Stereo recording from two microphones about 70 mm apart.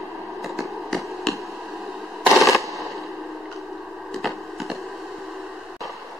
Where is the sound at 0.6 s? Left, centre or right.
Centre.